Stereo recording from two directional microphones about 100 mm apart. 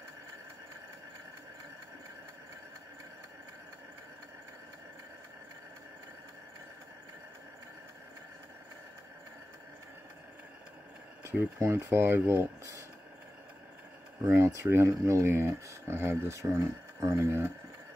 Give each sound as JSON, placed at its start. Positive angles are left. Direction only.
{"t": 11.2, "sound": "speech", "side_deg": -30}
{"t": 14.2, "sound": "speech", "side_deg": -30}